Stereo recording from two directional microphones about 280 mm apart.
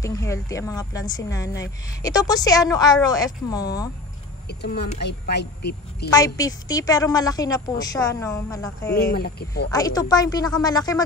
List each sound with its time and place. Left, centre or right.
0.0 s a woman's voice: centre
4.5 s speech: left
6.0 s a woman's voice: centre
8.9 s speech: left
9.7 s a woman's voice: centre